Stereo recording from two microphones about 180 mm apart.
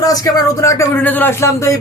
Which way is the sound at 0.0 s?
20° left (ahead or behind).